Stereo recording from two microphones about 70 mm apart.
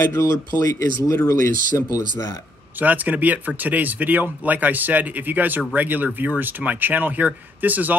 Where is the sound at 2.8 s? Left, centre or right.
Right.